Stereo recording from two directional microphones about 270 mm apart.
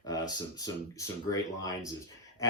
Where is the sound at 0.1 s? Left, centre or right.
Centre.